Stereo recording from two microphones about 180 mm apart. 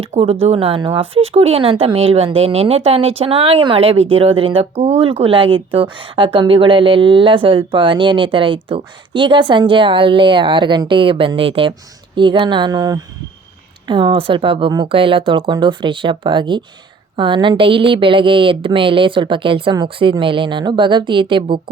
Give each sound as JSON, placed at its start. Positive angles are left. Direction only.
{"t": 0.0, "sound": "speech", "side_deg": -35}